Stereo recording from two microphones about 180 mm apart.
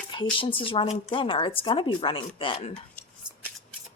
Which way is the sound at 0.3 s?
30° left (ahead or behind).